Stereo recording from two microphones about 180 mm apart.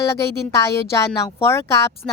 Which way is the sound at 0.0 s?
15° left (ahead or behind).